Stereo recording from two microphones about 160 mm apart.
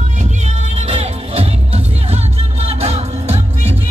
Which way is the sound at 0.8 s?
40° right (ahead or behind).